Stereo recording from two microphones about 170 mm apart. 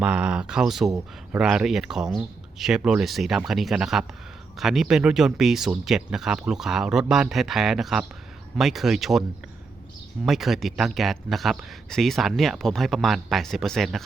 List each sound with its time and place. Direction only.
0.0 s speech: 5° right (ahead or behind)
0.9 s speech: 20° right (ahead or behind)
1.4 s speech: 5° right (ahead or behind)
10.2 s speech: centre (ahead or behind)